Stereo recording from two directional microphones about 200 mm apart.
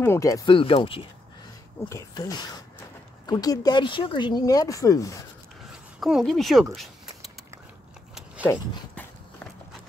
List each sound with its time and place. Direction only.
0.0 s speech: 15° left (ahead or behind)
1.9 s speech: 15° left (ahead or behind)
5.7 s speech: centre (ahead or behind)